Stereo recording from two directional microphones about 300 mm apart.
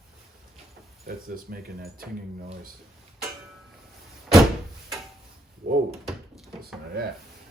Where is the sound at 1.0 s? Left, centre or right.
Right.